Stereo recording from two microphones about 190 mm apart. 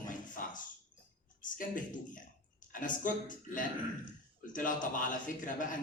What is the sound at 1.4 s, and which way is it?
Speech, 45° left (ahead or behind).